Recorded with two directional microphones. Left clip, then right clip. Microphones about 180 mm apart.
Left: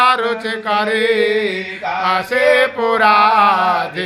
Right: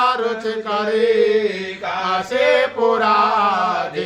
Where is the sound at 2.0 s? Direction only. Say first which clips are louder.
Left 3 dB; 15° left (ahead or behind).